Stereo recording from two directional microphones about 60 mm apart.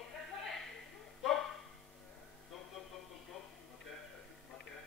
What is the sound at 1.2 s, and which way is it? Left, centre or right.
Music, centre.